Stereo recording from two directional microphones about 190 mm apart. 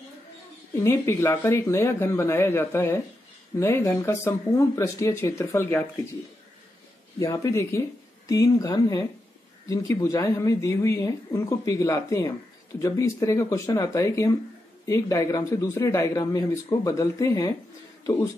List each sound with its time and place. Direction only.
0.8 s speech: 15° left (ahead or behind)
7.2 s speech: 15° left (ahead or behind)